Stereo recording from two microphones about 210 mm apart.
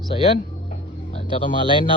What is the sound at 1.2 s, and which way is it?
Speech, 25° left (ahead or behind).